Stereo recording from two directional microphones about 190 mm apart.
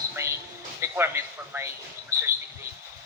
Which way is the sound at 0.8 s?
15° right (ahead or behind).